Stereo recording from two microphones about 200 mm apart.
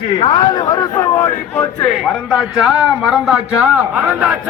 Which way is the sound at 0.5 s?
15° left (ahead or behind).